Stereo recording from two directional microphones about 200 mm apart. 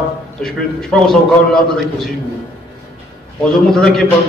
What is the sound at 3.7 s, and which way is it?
Speech, 5° left (ahead or behind).